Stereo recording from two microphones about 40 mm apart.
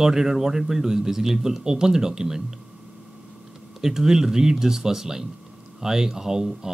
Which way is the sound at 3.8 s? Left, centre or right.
Centre.